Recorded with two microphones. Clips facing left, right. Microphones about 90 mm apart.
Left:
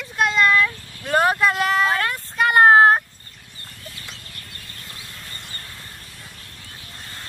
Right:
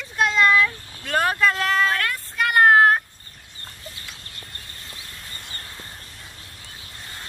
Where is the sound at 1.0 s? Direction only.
15° left (ahead or behind).